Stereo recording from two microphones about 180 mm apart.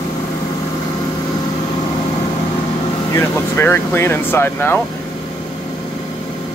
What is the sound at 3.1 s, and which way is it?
Speech, 15° left (ahead or behind).